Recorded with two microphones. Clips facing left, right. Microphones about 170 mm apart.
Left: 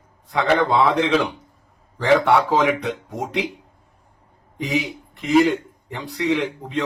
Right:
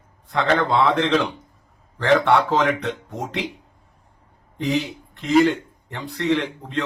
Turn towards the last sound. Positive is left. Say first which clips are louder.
# left 1 dB
turn(degrees=5)  # may be behind; listen again after turning